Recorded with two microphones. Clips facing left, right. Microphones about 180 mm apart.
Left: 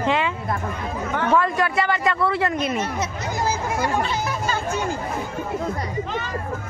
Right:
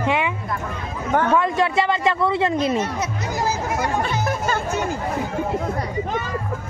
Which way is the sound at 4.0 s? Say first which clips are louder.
Right 1 dB; 55° right (ahead or behind).